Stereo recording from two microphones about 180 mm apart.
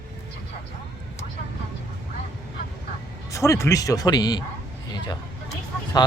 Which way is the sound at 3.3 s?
15° left (ahead or behind).